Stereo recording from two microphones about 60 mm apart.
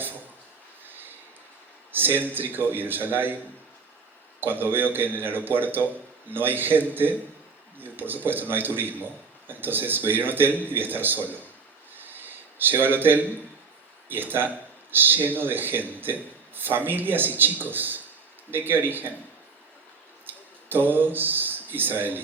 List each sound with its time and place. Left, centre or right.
0.9 s a sound: right
1.9 s speech: right
4.4 s speech: right
12.0 s a sound: right
14.1 s speech: right
20.2 s speech: right